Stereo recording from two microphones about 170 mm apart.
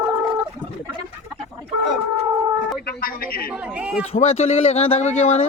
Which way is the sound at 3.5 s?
10° right (ahead or behind).